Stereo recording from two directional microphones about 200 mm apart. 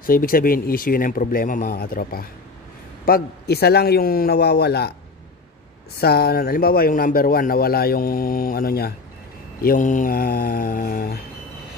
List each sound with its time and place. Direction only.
0.0 s a man's voice: 45° left (ahead or behind)
5.9 s a man's voice: 50° left (ahead or behind)